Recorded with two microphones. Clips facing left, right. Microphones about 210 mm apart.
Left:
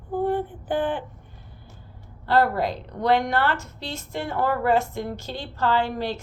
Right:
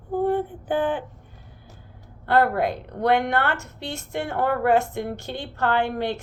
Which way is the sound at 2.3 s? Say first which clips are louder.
Right 1 dB; 55° right (ahead or behind).